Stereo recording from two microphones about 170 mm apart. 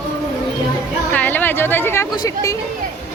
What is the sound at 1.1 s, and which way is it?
A woman's voice, 10° left (ahead or behind).